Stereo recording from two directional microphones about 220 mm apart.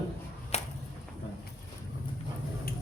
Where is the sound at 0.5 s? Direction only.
30° left (ahead or behind).